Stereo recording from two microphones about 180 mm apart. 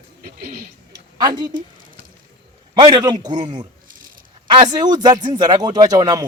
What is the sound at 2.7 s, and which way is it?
A man's voice, 25° right (ahead or behind).